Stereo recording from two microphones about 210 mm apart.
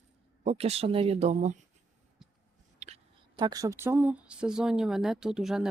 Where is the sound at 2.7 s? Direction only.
30° right (ahead or behind).